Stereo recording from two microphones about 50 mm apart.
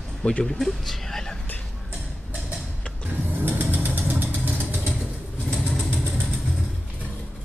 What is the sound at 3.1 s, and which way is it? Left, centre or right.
Vehicle, right.